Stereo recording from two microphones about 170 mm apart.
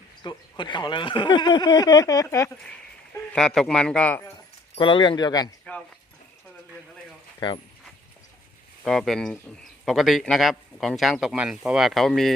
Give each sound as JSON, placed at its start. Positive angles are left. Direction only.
{"t": 0.2, "sound": "speech", "side_deg": 25}
{"t": 3.3, "sound": "a man's voice", "side_deg": 5}
{"t": 4.7, "sound": "speech", "side_deg": 30}
{"t": 5.7, "sound": "speech", "side_deg": 10}
{"t": 7.3, "sound": "speech", "side_deg": 30}
{"t": 8.8, "sound": "a man's voice", "side_deg": 0}